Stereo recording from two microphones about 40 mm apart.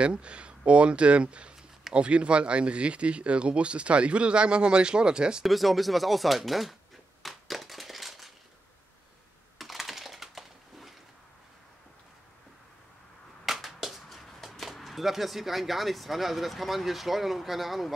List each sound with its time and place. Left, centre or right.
0.0 s speech: right
5.4 s speech: centre
7.2 s a sound: centre
9.6 s typing: centre
13.5 s a sound: centre
14.0 s speech: centre